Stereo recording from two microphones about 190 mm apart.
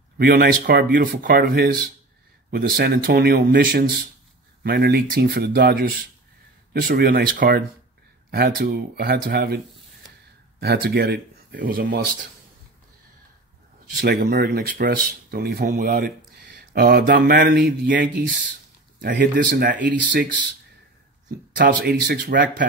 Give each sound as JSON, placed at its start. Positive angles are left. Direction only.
{"t": 0.2, "sound": "speech", "side_deg": -50}
{"t": 10.6, "sound": "speech", "side_deg": -55}
{"t": 13.9, "sound": "speech", "side_deg": -55}
{"t": 21.5, "sound": "speech", "side_deg": -55}